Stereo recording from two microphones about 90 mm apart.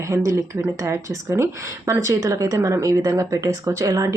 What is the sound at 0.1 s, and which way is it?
Speech, 35° right (ahead or behind).